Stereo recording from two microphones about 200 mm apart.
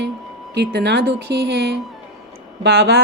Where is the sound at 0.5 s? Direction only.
55° right (ahead or behind).